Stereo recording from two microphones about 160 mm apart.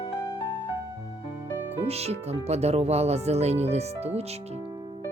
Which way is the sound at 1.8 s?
40° right (ahead or behind).